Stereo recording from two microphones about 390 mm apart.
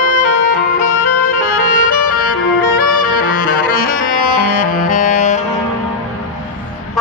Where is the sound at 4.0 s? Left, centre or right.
Left.